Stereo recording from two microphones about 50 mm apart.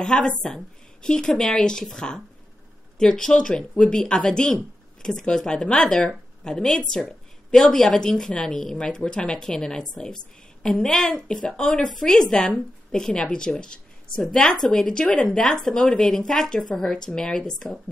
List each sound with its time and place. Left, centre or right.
0.0 s a woman's voice: centre